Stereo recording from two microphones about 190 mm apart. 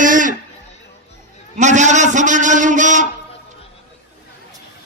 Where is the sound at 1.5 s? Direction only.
40° right (ahead or behind).